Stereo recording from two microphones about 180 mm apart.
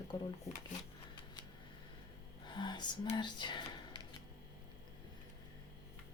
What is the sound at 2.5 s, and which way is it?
Speech, 25° left (ahead or behind).